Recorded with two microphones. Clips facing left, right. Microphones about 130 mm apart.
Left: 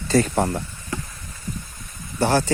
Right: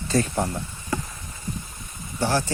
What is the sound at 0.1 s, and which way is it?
Speech, 80° left.